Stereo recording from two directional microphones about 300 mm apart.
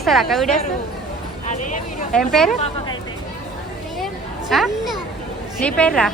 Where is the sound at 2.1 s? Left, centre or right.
Centre.